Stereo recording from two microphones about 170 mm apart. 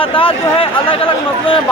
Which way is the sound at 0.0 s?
30° left (ahead or behind).